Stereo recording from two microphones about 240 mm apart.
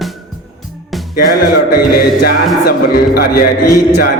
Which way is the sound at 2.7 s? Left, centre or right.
Left.